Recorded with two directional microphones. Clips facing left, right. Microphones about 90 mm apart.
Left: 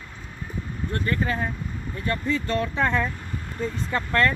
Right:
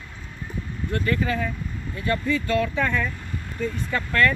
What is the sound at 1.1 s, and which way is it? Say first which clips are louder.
Speech: right 1 dB; 35° left (ahead or behind).